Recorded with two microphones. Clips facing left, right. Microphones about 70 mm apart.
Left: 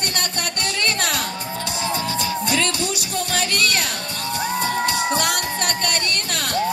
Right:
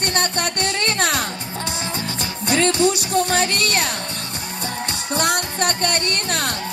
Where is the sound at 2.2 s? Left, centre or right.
Right.